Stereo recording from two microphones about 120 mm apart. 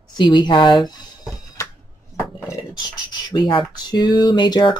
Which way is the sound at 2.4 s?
25° left (ahead or behind).